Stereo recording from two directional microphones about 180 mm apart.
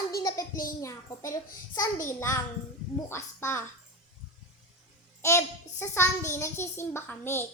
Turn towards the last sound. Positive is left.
turn(degrees=10)  # may be behind; listen again after turning